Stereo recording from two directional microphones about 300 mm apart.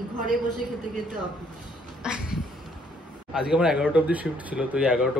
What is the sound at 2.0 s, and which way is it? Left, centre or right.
Speech, centre.